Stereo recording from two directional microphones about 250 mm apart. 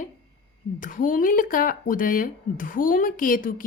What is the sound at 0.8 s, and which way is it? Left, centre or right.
Speech, left.